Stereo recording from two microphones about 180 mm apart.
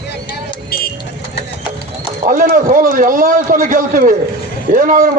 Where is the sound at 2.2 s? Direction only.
50° right (ahead or behind).